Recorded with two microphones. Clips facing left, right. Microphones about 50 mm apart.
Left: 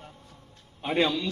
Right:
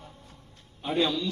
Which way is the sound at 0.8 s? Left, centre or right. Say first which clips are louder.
Left 1 dB; left.